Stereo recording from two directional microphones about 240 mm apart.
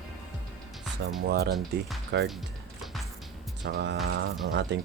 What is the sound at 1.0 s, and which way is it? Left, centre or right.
Speech, right.